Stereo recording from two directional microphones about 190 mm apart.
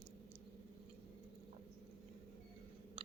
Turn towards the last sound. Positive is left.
turn(degrees=-30)  # may be behind; listen again after turning